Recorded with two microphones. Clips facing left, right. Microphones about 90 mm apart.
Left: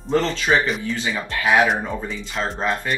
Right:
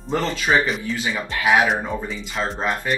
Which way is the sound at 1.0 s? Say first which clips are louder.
Even; 20° right (ahead or behind).